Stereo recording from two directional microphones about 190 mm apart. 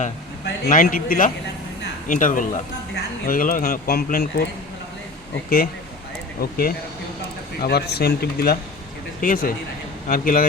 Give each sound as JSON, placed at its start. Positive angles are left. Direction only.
{"t": 0.7, "sound": "speech", "side_deg": 45}
{"t": 6.4, "sound": "speech", "side_deg": 50}